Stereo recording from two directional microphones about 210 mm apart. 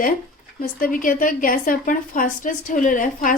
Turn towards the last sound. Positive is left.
turn(degrees=40)  # may be behind; listen again after turning